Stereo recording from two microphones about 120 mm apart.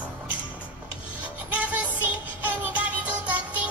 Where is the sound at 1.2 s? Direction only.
10° right (ahead or behind).